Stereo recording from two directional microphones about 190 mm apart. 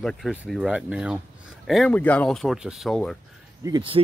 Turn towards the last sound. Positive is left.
turn(degrees=-25)  # may be behind; listen again after turning